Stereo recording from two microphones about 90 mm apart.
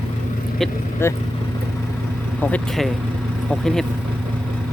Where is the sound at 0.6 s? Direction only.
5° left (ahead or behind).